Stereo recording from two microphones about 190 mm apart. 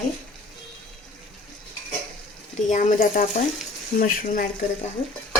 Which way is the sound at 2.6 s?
40° left (ahead or behind).